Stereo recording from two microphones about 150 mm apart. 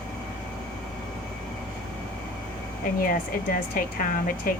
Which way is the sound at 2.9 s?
65° left (ahead or behind).